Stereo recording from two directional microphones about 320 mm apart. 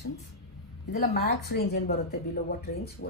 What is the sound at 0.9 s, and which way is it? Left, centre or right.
A woman's voice, left.